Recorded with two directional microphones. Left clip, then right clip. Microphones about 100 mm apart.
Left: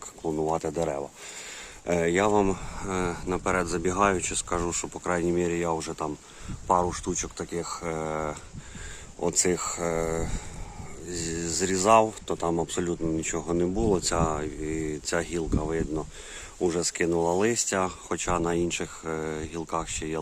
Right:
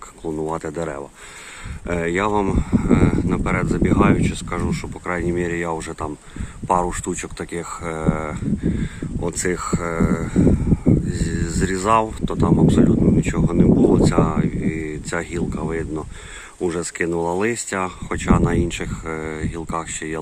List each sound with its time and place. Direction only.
0.3 s speech: 10° left (ahead or behind)
0.6 s speech: 20° left (ahead or behind); by 4.9 s 50° left (ahead or behind)
5.0 s speech: 30° left (ahead or behind)
5.4 s speech: 20° left (ahead or behind)
6.7 s speech: centre (ahead or behind)
7.3 s speech: 20° left (ahead or behind)
7.9 s speech: 10° left (ahead or behind)
8.8 s speech: 25° left (ahead or behind)
19.0 s speech: 10° left (ahead or behind)